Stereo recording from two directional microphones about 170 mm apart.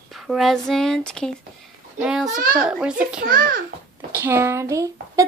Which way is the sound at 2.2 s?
55° right (ahead or behind).